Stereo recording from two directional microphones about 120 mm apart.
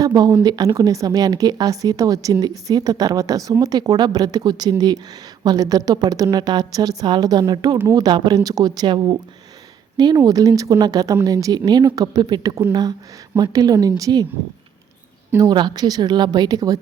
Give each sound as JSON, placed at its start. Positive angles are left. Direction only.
{"t": 0.0, "sound": "a woman's voice", "side_deg": -35}
{"t": 10.2, "sound": "a woman's voice", "side_deg": -30}
{"t": 15.4, "sound": "a woman's voice", "side_deg": -35}